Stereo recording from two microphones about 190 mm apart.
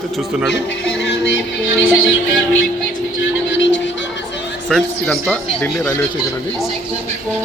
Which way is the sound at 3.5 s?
75° left (ahead or behind).